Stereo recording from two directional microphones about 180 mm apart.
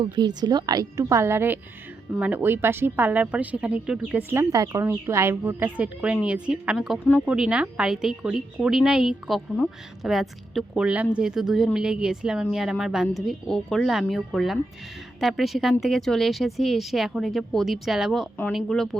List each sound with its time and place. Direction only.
0.0 s a woman's voice: 25° right (ahead or behind); by 18.9 s centre (ahead or behind)